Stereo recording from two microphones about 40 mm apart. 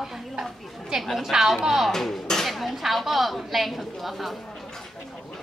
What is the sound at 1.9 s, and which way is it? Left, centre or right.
Speech, centre.